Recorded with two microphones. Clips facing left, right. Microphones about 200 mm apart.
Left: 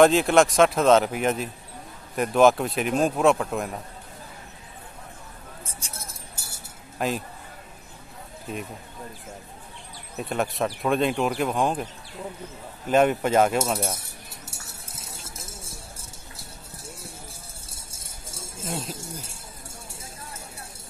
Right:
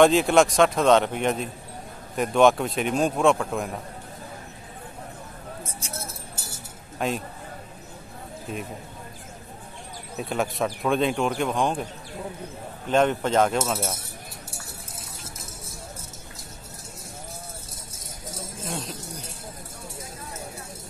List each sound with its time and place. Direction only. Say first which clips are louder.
0.0 s speech: even; centre (ahead or behind)
7.0 s speech: even; centre (ahead or behind)
10.1 s speech: even; centre (ahead or behind)
12.8 s speech: left 1 dB; 5° left (ahead or behind)
15.2 s music: right 1 dB; 30° left (ahead or behind)
17.9 s a sound: right 6 dB; 30° left (ahead or behind)
18.7 s speech: left 2 dB; 5° left (ahead or behind)